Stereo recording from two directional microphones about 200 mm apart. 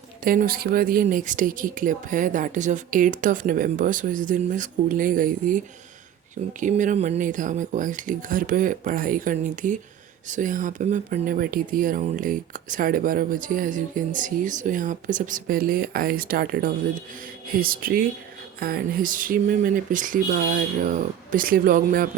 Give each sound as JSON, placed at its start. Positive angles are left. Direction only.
{"t": 0.3, "sound": "speech", "side_deg": -45}